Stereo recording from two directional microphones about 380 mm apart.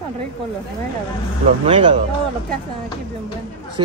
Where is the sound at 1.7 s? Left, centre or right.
Centre.